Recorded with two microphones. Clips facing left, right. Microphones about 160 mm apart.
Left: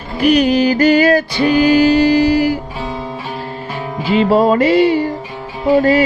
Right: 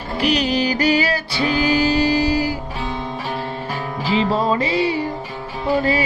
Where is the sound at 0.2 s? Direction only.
55° left (ahead or behind).